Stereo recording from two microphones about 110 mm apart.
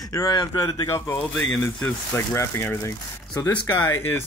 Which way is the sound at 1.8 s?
15° left (ahead or behind).